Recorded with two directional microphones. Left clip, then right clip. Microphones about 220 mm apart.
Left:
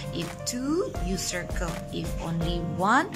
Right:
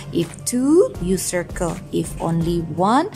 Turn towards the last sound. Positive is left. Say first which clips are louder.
# right 6 dB
turn(degrees=-20)  # may be behind; listen again after turning